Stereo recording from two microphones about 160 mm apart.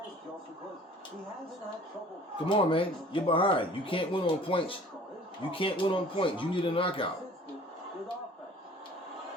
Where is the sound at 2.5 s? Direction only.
35° left (ahead or behind).